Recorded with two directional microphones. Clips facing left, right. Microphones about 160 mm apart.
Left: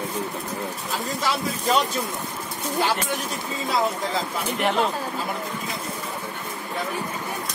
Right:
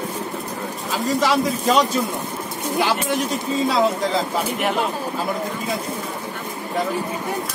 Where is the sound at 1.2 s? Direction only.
75° right (ahead or behind).